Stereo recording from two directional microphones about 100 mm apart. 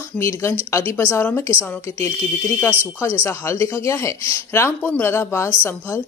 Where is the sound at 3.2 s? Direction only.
25° left (ahead or behind).